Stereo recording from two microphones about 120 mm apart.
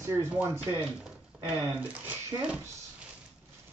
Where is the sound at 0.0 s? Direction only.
20° right (ahead or behind).